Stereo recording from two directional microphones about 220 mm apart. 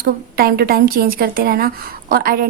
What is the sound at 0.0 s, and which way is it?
A woman's voice, 40° right (ahead or behind).